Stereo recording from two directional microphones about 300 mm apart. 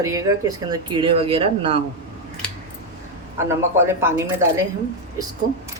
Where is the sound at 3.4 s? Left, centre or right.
Centre.